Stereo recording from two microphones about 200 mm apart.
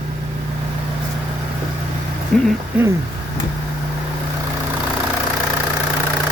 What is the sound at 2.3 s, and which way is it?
Speech, centre (ahead or behind).